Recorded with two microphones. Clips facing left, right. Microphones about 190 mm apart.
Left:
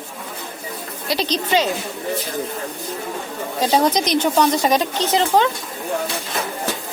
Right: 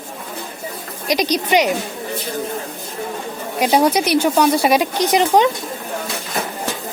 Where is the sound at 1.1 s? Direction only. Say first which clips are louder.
Right 3 dB; 15° right (ahead or behind).